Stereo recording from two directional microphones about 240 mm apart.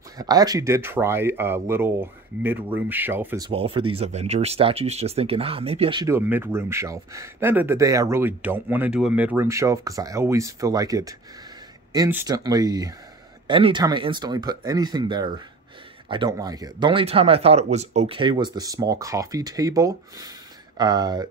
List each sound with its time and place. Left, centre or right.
0.2 s speech: centre
3.4 s speech: right